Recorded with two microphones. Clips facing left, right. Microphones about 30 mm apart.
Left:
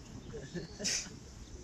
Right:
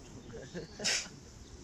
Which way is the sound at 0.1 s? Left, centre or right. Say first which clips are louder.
Left 1 dB; centre.